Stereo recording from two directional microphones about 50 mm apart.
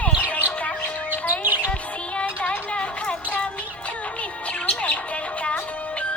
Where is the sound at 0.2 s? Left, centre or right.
Left.